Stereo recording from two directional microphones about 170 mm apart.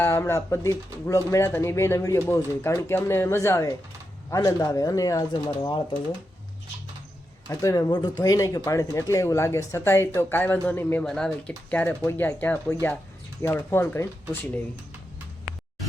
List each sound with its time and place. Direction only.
0.0 s speech: 15° left (ahead or behind)
7.4 s speech: 20° left (ahead or behind)